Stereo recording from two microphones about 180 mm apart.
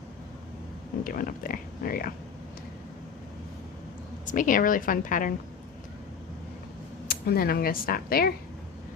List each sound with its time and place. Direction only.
1.0 s speech: 50° left (ahead or behind)
4.3 s speech: 45° left (ahead or behind)
7.1 s speech: 55° left (ahead or behind)